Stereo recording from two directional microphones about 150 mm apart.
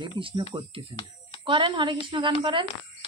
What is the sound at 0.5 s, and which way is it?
A woman's voice, 25° right (ahead or behind).